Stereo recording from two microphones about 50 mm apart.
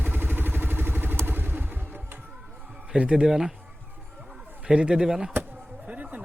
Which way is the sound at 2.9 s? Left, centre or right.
Right.